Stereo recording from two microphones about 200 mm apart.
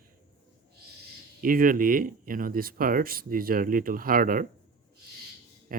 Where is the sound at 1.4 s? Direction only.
45° right (ahead or behind).